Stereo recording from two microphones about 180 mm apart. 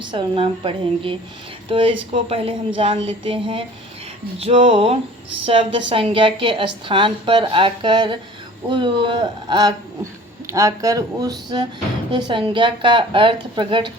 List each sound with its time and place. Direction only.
0.0 s speech: 25° right (ahead or behind)
4.4 s a sound: 30° right (ahead or behind)
5.5 s speech: 30° right (ahead or behind)